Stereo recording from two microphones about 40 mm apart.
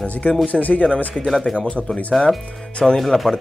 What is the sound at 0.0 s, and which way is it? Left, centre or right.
Speech, left.